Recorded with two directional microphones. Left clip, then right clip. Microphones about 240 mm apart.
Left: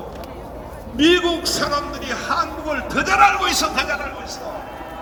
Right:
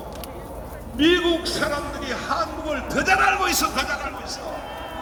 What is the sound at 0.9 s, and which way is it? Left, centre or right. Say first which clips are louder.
Speech: left 3 dB; left.